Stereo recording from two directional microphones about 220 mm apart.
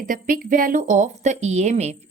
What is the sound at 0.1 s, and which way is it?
A woman's voice, 40° right (ahead or behind).